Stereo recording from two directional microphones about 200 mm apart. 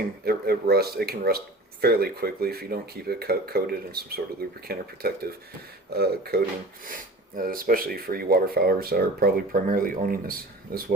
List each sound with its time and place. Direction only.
0.3 s speech: 50° right (ahead or behind)